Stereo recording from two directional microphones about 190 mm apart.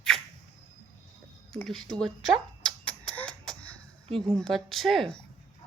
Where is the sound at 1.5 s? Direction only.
Centre (ahead or behind).